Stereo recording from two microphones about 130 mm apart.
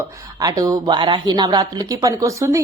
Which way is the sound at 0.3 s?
30° right (ahead or behind).